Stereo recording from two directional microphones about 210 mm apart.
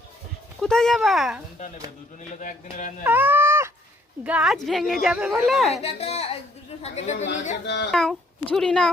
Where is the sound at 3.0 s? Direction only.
10° right (ahead or behind).